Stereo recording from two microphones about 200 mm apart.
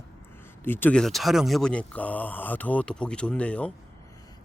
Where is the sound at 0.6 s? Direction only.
10° left (ahead or behind).